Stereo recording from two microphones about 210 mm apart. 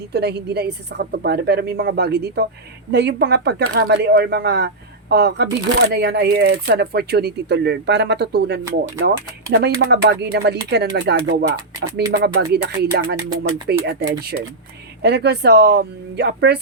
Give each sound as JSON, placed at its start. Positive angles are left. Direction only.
{"t": 0.1, "sound": "speech", "side_deg": -50}
{"t": 15.0, "sound": "speech", "side_deg": -50}